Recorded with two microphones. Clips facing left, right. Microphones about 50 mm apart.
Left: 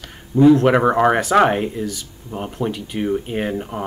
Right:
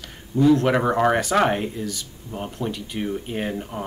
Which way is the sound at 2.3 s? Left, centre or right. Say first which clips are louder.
Left 5 dB; centre.